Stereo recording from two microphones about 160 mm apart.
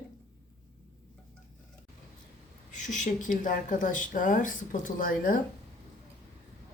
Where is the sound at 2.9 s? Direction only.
50° left (ahead or behind).